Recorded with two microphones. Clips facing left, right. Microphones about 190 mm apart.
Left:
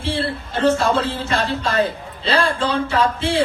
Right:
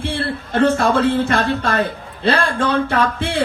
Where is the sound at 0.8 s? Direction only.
55° right (ahead or behind).